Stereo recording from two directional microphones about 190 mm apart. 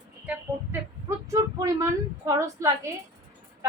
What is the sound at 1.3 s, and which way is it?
A woman's voice, 15° right (ahead or behind).